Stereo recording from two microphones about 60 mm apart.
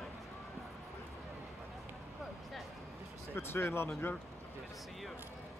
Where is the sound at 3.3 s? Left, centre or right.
Left.